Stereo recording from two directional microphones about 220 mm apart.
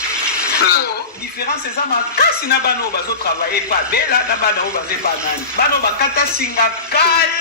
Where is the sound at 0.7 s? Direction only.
45° left (ahead or behind).